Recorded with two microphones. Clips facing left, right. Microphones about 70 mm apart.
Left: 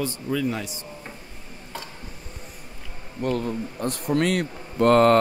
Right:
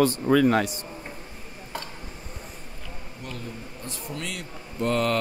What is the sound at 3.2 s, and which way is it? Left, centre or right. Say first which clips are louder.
Speech: left 13 dB; left.